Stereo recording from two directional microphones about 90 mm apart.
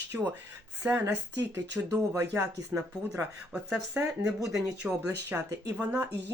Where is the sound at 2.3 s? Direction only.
30° right (ahead or behind).